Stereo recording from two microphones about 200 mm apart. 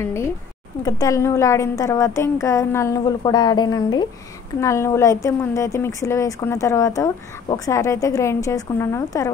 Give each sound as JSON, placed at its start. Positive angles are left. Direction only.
{"t": 0.0, "sound": "a woman's voice", "side_deg": 15}